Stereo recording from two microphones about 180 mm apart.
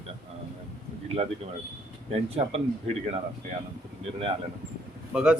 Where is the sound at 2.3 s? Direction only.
35° right (ahead or behind).